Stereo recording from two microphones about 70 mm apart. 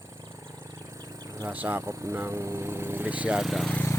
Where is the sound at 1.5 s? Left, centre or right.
Right.